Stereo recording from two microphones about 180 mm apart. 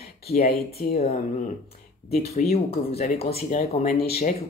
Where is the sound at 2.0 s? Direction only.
40° left (ahead or behind).